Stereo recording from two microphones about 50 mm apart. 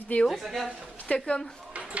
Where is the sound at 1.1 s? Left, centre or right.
Centre.